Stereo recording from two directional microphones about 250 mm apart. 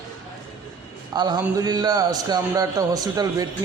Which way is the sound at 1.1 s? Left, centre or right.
Centre.